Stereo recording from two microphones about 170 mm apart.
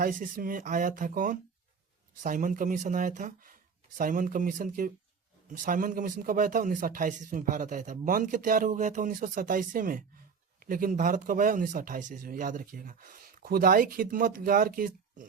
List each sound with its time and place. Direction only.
0.0 s speech: 55° right (ahead or behind)